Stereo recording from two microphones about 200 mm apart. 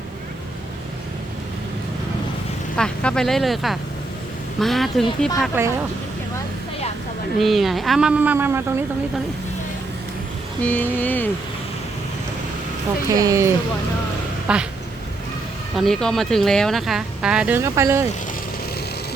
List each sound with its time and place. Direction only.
2.7 s speech: 5° left (ahead or behind)
5.6 s speech: 10° right (ahead or behind)
7.3 s speech: centre (ahead or behind)
10.6 s a sound: 10° left (ahead or behind)
13.1 s speech: 15° right (ahead or behind)
14.4 s quack: 5° right (ahead or behind)
15.7 s speech: centre (ahead or behind)